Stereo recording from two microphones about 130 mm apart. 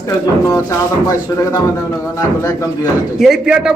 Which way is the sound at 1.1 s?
25° left (ahead or behind).